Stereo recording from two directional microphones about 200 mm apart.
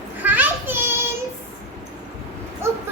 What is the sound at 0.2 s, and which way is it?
Child singing, 10° right (ahead or behind).